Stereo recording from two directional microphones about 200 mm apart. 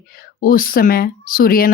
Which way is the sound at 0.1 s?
45° left (ahead or behind).